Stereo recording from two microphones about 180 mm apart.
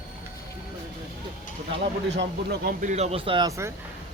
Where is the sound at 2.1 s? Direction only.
70° right (ahead or behind).